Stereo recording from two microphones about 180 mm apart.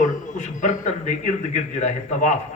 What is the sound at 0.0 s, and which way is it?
A man's voice, 45° left (ahead or behind).